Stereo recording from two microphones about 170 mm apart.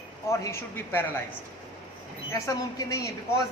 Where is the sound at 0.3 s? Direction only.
15° left (ahead or behind).